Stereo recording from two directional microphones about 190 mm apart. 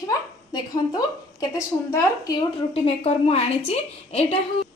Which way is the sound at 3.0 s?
35° left (ahead or behind).